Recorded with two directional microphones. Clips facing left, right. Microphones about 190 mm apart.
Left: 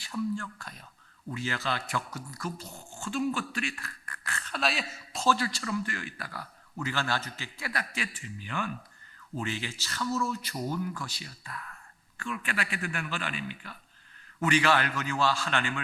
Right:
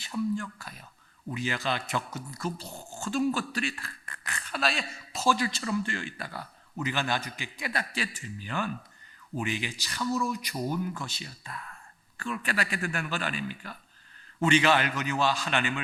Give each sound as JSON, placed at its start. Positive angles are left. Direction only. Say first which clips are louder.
{"t": 0.0, "sound": "a man's voice", "louder": "right 2 dB", "side_deg": -20}
{"t": 4.5, "sound": "speech", "louder": "right 1 dB", "side_deg": 0}
{"t": 5.2, "sound": "a man's voice", "louder": "right 1 dB", "side_deg": -15}
{"t": 9.3, "sound": "speech", "louder": "right 2 dB", "side_deg": -15}
{"t": 12.1, "sound": "a man's voice", "louder": "right 3 dB", "side_deg": -35}
{"t": 14.4, "sound": "a man's voice", "louder": "right 2 dB", "side_deg": -20}